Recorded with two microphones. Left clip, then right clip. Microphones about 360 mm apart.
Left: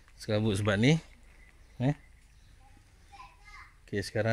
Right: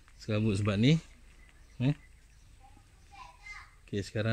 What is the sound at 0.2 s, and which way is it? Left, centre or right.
Speech, centre.